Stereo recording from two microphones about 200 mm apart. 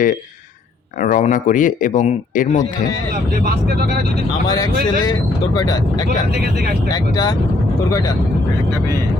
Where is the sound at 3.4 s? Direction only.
50° right (ahead or behind).